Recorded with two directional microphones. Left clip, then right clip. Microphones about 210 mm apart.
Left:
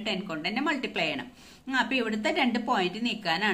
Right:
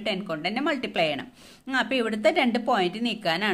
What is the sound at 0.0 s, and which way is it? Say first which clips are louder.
A woman's voice: right 3 dB; 50° right (ahead or behind).